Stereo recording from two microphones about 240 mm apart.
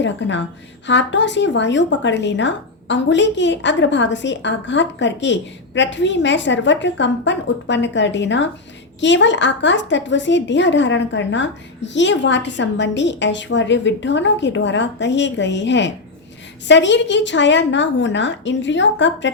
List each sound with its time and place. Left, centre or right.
0.0 s speech: left